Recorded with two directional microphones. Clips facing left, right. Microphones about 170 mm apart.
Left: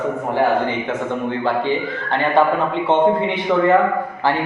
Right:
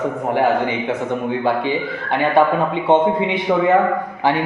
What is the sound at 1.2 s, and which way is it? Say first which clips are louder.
A man's voice: even; 15° right (ahead or behind).